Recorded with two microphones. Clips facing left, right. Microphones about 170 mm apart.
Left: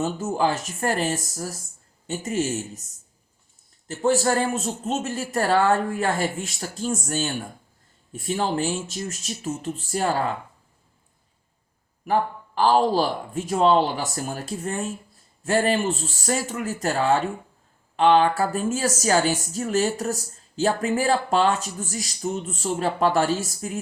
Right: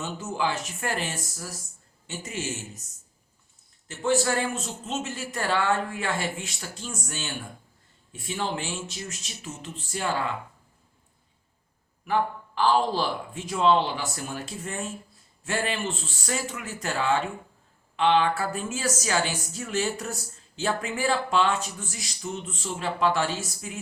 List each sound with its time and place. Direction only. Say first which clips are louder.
0.0 s a woman's voice: left 6 dB; 40° left (ahead or behind)
3.8 s a woman's voice: left 4 dB; 40° left (ahead or behind)
12.0 s a woman's voice: left 3 dB; 40° left (ahead or behind)